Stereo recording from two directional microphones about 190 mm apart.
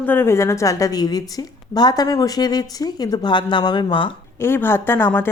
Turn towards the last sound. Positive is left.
turn(degrees=10)  # may be behind; listen again after turning